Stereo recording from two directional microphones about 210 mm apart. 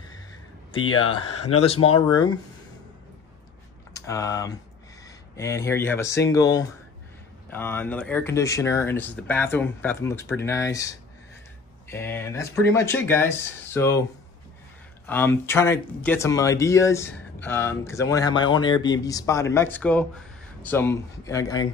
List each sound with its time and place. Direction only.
1.5 s speech: 30° left (ahead or behind)
3.9 s speech: 15° left (ahead or behind)
15.0 s speech: 10° left (ahead or behind)